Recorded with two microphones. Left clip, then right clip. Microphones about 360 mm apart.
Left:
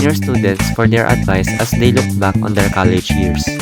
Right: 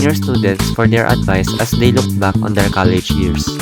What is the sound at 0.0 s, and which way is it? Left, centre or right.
Speech, centre.